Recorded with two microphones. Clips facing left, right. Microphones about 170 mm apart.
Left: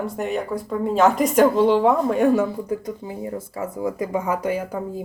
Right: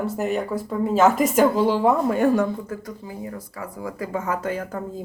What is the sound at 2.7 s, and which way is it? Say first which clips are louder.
Speech: left 6 dB; 20° left (ahead or behind).